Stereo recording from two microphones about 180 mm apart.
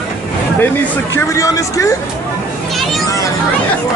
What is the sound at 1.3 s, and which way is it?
Speech, 15° left (ahead or behind).